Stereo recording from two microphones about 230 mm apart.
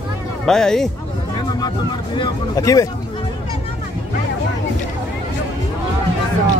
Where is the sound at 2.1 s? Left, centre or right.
Centre.